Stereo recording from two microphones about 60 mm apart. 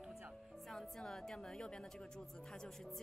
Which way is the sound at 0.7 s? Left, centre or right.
Centre.